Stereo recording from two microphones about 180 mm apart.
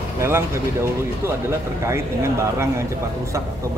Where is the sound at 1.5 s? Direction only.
15° right (ahead or behind).